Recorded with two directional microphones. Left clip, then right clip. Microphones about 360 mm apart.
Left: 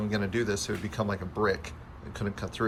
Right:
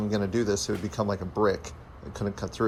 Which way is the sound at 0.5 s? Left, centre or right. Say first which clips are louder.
Right 3 dB; centre.